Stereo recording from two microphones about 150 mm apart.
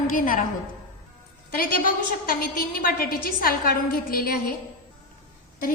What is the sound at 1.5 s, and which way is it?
A woman's voice, 75° left (ahead or behind).